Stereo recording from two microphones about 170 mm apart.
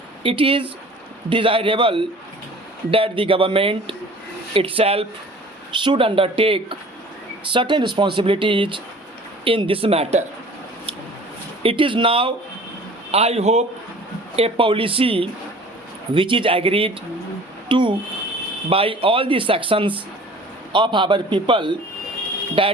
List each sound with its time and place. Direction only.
0.2 s speech: 30° right (ahead or behind)
11.6 s speech: 30° right (ahead or behind)